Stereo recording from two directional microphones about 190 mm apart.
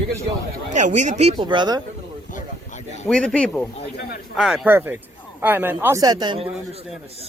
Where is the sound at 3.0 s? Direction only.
5° left (ahead or behind); by 6.4 s 25° right (ahead or behind).